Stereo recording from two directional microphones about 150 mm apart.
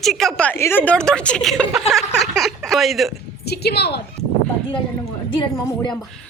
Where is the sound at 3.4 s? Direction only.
90° left.